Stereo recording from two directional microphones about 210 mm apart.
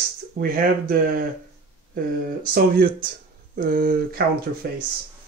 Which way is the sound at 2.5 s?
45° right (ahead or behind).